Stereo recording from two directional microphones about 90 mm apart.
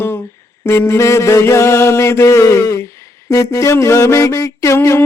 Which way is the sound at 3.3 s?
35° left (ahead or behind).